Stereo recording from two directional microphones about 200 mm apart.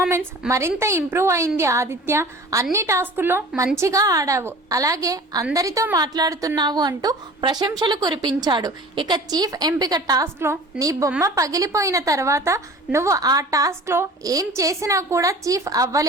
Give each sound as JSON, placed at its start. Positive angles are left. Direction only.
{"t": 0.4, "sound": "a woman's voice", "side_deg": -15}